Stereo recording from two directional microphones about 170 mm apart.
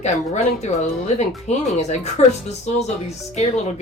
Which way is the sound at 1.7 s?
40° left (ahead or behind).